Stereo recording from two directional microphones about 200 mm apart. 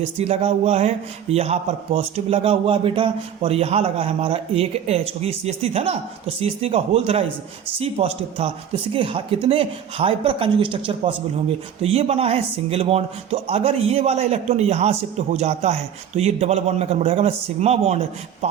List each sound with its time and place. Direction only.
0.2 s a man's voice: 30° right (ahead or behind)